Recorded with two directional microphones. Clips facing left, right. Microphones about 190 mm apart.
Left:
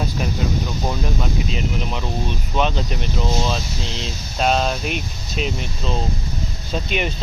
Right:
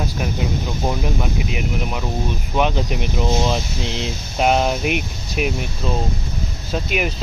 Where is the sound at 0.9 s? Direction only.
15° right (ahead or behind).